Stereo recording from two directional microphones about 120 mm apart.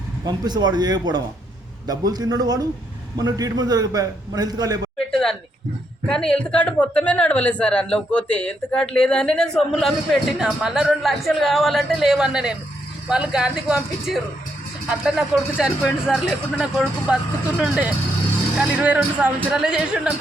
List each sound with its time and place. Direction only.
0.3 s a man's voice: 35° right (ahead or behind)
4.9 s a sound: 5° left (ahead or behind)
6.1 s speech: 5° left (ahead or behind)